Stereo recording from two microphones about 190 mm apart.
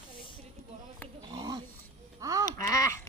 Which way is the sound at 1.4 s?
20° right (ahead or behind).